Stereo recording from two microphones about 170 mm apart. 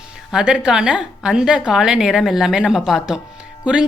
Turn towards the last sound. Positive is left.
turn(degrees=-5)  # may be behind; listen again after turning